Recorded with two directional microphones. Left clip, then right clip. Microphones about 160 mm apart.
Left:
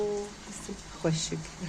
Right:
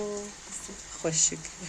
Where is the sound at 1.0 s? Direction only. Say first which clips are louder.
Even; 15° right (ahead or behind).